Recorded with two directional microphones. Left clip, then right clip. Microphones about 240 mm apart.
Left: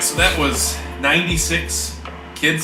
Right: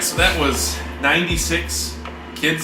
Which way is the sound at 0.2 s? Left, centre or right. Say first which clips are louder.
Even; centre.